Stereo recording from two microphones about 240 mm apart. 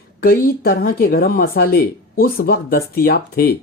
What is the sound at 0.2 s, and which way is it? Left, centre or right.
Speech, left.